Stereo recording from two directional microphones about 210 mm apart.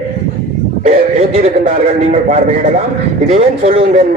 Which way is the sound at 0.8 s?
25° right (ahead or behind).